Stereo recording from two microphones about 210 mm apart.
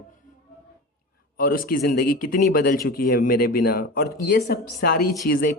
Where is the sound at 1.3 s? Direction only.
45° left (ahead or behind).